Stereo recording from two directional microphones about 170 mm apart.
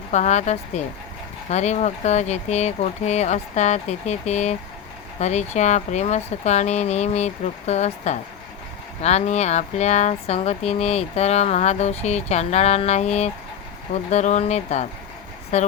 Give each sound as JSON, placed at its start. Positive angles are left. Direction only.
{"t": 0.1, "sound": "speech", "side_deg": 40}